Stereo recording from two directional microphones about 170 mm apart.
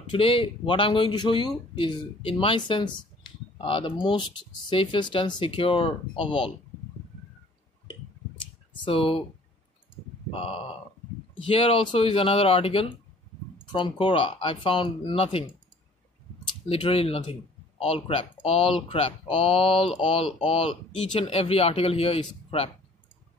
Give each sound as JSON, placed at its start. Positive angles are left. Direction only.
{"t": 0.1, "sound": "speech", "side_deg": 30}
{"t": 8.8, "sound": "speech", "side_deg": 35}
{"t": 10.3, "sound": "speech", "side_deg": 30}
{"t": 16.6, "sound": "speech", "side_deg": 35}